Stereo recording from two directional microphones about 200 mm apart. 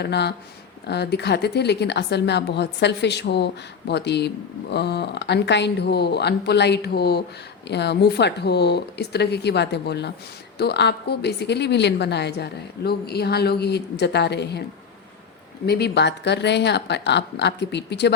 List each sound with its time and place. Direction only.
0.0 s a woman's voice: 55° left (ahead or behind)
15.6 s a woman's voice: 55° left (ahead or behind)